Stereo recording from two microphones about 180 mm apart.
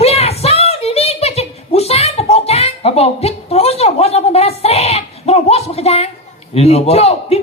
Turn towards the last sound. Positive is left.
turn(degrees=35)  # may be behind; listen again after turning